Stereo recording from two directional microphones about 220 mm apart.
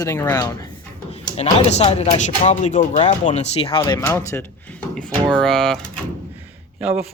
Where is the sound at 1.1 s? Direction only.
30° left (ahead or behind); by 5.8 s 5° left (ahead or behind).